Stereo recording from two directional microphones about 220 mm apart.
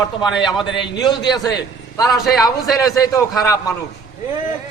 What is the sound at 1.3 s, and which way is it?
Speech, 20° left (ahead or behind).